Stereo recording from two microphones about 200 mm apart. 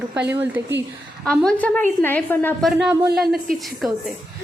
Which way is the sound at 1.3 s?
5° left (ahead or behind).